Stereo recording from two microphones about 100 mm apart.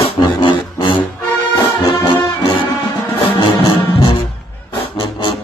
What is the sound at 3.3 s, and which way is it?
Music, 50° left (ahead or behind).